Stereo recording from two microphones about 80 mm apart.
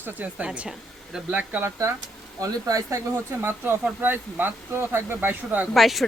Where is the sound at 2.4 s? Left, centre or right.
Right.